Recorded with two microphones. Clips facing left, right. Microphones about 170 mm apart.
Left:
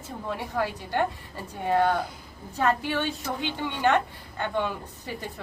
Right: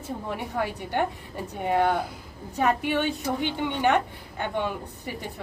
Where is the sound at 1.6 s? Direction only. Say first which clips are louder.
Even; 15° right (ahead or behind).